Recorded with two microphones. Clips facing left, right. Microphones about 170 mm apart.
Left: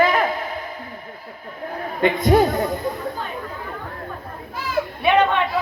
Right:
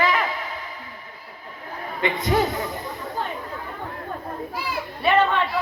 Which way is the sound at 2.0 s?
50° left (ahead or behind).